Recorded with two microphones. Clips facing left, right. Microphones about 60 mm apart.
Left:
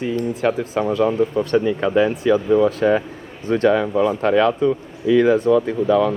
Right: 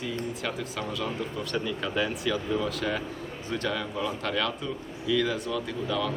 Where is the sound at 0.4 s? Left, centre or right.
Left.